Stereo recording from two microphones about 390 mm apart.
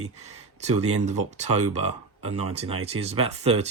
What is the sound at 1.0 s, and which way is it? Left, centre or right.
Speech, centre.